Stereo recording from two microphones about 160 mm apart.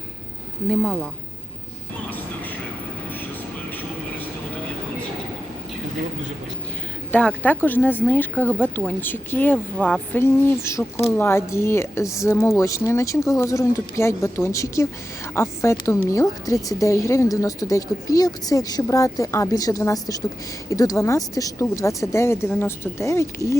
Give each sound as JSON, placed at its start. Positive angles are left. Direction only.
{"t": 0.7, "sound": "speech", "side_deg": 0}
{"t": 7.1, "sound": "a woman's voice", "side_deg": 10}